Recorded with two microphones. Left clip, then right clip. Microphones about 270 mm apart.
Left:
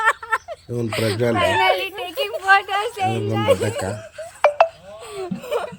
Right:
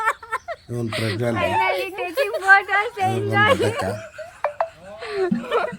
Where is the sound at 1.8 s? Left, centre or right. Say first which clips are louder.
Right 2 dB; left.